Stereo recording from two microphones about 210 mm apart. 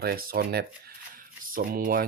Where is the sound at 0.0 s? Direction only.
45° right (ahead or behind).